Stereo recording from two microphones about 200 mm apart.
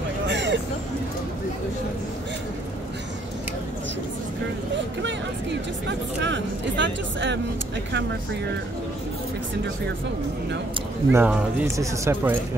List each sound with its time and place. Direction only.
0.3 s hubbub: 60° right (ahead or behind)
5.0 s a sound: 60° right (ahead or behind)
11.1 s speech: 10° right (ahead or behind)